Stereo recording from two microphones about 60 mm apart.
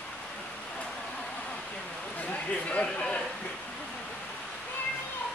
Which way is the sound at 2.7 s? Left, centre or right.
Left.